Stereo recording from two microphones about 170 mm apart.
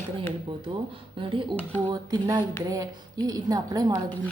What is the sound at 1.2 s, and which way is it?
A woman's voice, 30° right (ahead or behind).